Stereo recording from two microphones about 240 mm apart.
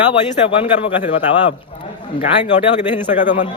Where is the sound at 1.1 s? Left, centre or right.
Left.